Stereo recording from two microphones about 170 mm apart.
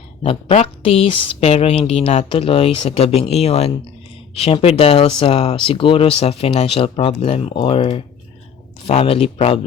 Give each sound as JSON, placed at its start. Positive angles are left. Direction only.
{"t": 0.2, "sound": "speech", "side_deg": 35}